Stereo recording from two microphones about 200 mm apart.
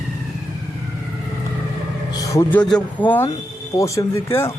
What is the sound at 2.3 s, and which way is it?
Speech, 15° left (ahead or behind).